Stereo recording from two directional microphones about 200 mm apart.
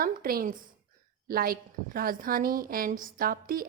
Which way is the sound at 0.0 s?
45° right (ahead or behind).